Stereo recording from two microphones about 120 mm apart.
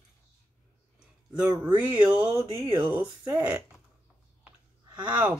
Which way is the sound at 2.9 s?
15° right (ahead or behind).